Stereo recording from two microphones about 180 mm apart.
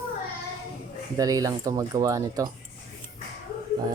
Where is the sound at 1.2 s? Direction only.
20° right (ahead or behind).